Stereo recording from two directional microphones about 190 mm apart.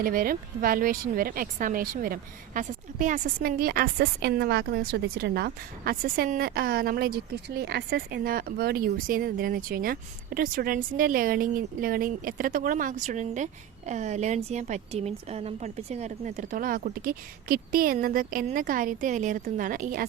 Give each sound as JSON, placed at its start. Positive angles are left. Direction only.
{"t": 0.0, "sound": "speech", "side_deg": -50}